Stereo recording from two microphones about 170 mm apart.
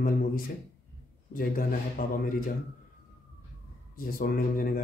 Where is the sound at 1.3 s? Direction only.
55° left (ahead or behind).